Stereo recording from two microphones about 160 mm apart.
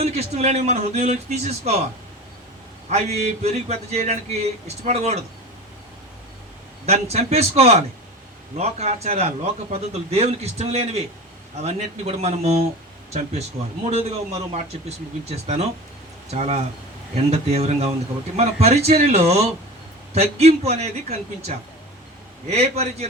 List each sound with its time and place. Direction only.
0.0 s speech: 45° right (ahead or behind)
3.2 s speech: 40° right (ahead or behind)
6.8 s a man's voice: 40° right (ahead or behind)
13.8 s a man's voice: 40° right (ahead or behind)